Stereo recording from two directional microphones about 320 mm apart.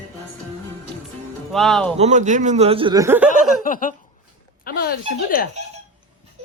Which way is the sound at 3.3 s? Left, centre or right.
Left.